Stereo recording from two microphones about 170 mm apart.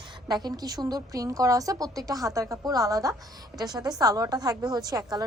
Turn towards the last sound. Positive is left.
turn(degrees=-20)  # may be behind; listen again after turning